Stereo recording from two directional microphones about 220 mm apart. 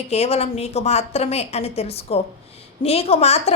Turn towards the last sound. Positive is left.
turn(degrees=30)  # may be behind; listen again after turning